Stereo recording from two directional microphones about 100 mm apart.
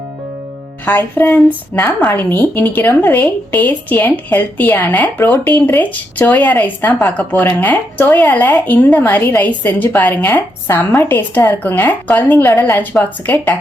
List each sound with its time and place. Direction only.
0.9 s a woman's voice: 20° left (ahead or behind)